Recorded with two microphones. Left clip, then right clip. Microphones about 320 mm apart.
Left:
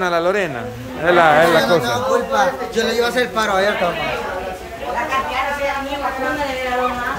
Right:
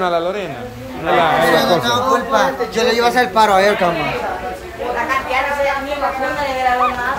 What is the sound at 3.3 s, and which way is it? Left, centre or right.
Speech, right.